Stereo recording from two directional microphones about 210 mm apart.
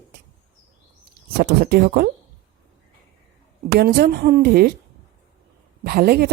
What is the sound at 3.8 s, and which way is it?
Speech, 45° right (ahead or behind).